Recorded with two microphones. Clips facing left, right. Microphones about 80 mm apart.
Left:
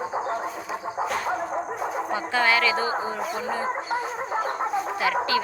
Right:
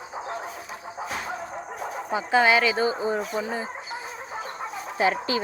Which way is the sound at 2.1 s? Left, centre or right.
Centre.